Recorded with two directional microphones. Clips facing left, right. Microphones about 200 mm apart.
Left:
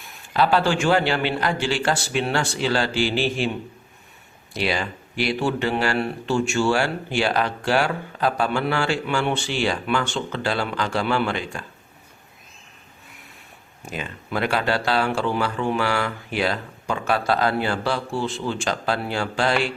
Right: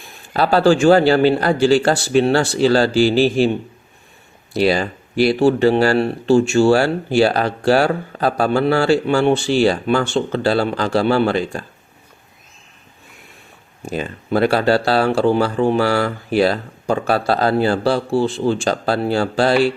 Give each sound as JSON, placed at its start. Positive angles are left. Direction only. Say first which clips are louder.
{"t": 0.3, "sound": "speech", "louder": "right 6 dB", "side_deg": -40}
{"t": 13.8, "sound": "speech", "louder": "right 8 dB", "side_deg": -35}